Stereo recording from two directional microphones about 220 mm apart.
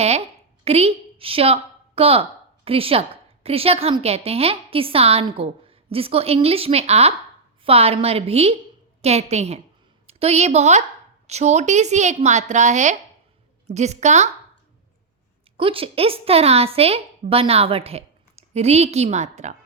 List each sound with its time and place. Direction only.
0.6 s a woman's voice: 30° right (ahead or behind)
15.5 s a woman's voice: 25° right (ahead or behind)